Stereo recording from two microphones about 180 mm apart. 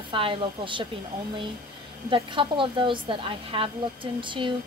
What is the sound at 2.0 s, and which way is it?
A woman's voice, 30° right (ahead or behind).